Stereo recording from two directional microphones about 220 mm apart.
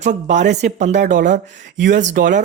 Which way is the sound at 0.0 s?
35° right (ahead or behind).